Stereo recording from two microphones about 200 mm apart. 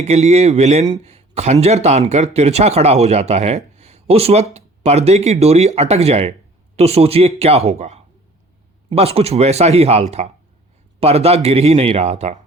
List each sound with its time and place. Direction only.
0.0 s speech: 35° right (ahead or behind)
1.0 s a sound: 30° right (ahead or behind)
1.6 s speech: 35° right (ahead or behind)